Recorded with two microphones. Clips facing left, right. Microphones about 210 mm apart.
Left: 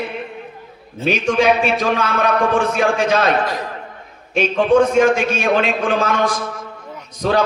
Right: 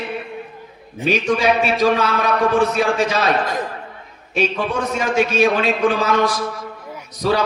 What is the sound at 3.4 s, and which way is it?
Speech, 50° right (ahead or behind).